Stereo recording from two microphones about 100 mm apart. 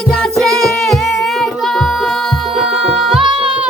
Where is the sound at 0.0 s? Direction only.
5° left (ahead or behind).